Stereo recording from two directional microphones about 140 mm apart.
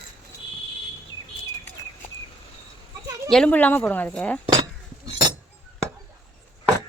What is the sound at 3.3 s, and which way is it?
Speech, 10° left (ahead or behind).